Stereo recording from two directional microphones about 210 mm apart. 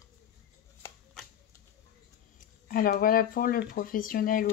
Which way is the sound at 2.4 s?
40° left (ahead or behind).